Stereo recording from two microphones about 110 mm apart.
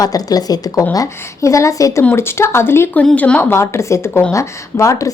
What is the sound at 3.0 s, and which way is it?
Speech, 10° left (ahead or behind).